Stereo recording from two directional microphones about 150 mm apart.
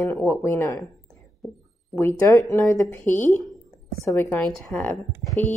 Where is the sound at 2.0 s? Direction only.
20° left (ahead or behind).